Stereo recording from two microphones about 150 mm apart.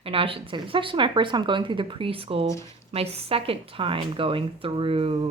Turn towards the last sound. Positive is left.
turn(degrees=-40)  # may be behind; listen again after turning